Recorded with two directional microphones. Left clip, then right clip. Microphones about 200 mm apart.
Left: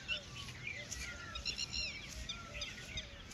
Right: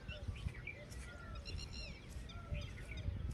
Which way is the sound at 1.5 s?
60° right (ahead or behind).